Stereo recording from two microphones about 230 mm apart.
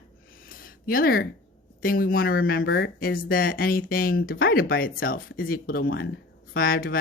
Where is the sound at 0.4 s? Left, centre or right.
Left.